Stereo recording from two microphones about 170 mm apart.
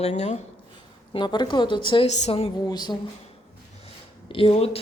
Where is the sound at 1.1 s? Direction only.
25° left (ahead or behind).